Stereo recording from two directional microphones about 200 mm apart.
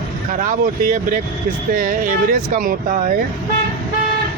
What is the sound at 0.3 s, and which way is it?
Speech, 40° right (ahead or behind).